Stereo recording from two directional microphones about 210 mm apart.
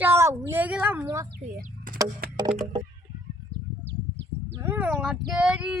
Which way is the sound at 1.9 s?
40° right (ahead or behind).